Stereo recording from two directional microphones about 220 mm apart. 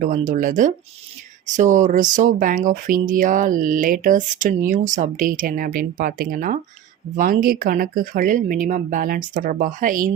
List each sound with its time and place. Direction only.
0.0 s speech: 40° right (ahead or behind)